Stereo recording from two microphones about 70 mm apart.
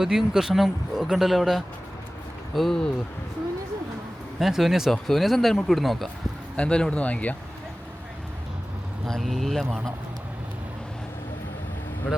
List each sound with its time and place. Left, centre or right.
0.0 s speech: centre
4.4 s speech: centre
6.6 s speech: centre
9.0 s speech: centre